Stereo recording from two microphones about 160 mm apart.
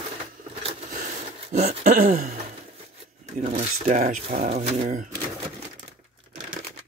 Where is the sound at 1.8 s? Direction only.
60° right (ahead or behind).